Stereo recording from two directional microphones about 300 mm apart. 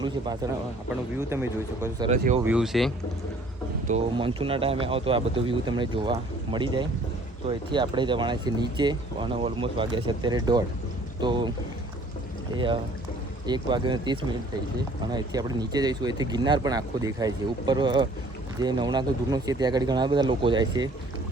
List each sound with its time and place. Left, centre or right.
1.3 s speech: centre
2.0 s speech: right
2.4 s speech: centre
3.8 s speech: centre
12.5 s speech: centre